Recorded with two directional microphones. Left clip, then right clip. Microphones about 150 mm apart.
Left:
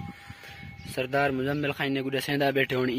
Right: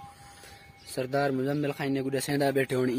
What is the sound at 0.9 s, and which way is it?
Speech, centre (ahead or behind).